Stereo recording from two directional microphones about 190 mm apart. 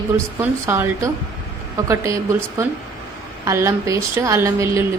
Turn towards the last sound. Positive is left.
turn(degrees=-15)  # may be behind; listen again after turning